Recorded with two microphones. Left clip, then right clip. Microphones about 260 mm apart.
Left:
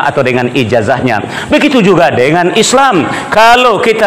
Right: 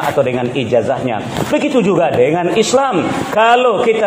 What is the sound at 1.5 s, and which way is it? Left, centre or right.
A man's voice, left.